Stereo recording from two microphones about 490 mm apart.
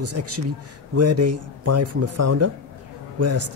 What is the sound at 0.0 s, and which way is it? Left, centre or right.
Speech, right.